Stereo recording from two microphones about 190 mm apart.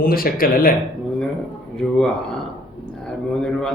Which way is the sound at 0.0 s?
50° left (ahead or behind).